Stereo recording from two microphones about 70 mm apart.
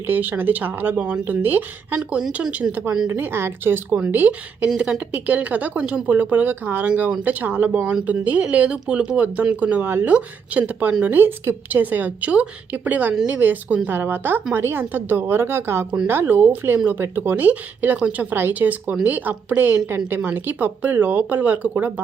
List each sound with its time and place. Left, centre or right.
0.1 s speech: right
3.1 s a woman's voice: right
17.3 s speech: right